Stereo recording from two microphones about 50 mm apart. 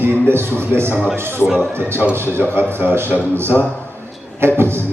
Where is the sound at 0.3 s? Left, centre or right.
Right.